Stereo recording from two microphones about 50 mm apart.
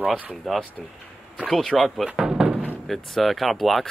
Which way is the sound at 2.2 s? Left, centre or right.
Centre.